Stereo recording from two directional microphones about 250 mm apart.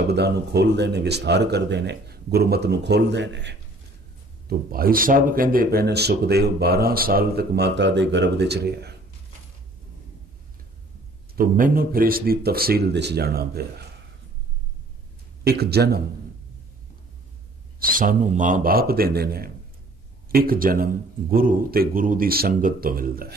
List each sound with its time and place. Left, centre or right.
0.0 s speech: right
11.3 s speech: right
15.4 s speech: right
17.7 s speech: right